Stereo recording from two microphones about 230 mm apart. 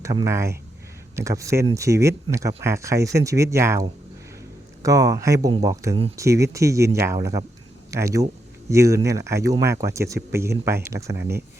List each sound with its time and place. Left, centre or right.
0.0 s speech: centre
11.2 s speech: right